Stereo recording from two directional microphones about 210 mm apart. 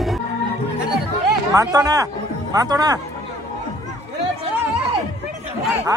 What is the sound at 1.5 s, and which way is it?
Speech, 15° right (ahead or behind).